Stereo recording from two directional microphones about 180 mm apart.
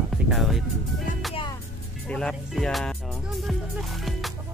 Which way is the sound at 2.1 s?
5° left (ahead or behind).